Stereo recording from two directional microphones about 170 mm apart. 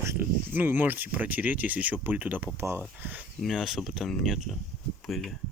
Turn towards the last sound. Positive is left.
turn(degrees=0)  # may be behind; listen again after turning